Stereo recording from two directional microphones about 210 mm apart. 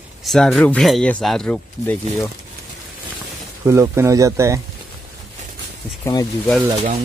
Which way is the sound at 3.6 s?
15° right (ahead or behind).